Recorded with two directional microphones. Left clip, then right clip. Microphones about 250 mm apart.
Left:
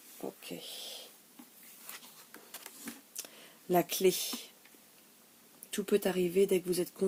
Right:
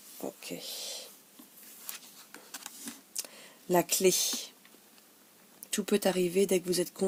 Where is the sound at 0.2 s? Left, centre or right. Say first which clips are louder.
Right 3 dB; right.